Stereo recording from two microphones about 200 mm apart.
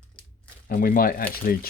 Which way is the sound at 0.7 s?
45° left (ahead or behind).